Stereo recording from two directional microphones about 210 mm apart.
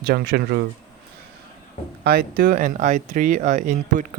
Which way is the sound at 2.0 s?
45° right (ahead or behind).